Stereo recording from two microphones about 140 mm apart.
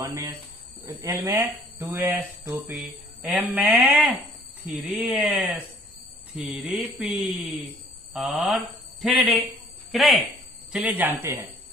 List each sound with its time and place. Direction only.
0.0 s speech: 20° right (ahead or behind)
8.1 s speech: centre (ahead or behind)
10.7 s speech: 10° right (ahead or behind)